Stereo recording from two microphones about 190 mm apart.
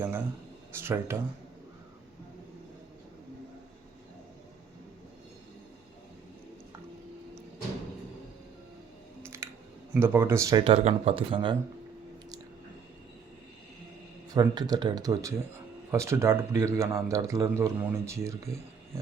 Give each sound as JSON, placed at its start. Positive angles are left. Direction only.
{"t": 0.8, "sound": "speech", "side_deg": -10}
{"t": 9.2, "sound": "typing", "side_deg": -15}
{"t": 9.9, "sound": "speech", "side_deg": -10}
{"t": 10.6, "sound": "speech", "side_deg": -30}
{"t": 14.3, "sound": "speech", "side_deg": -20}